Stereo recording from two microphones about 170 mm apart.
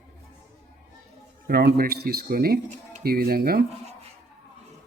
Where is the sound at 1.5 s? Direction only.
70° right (ahead or behind).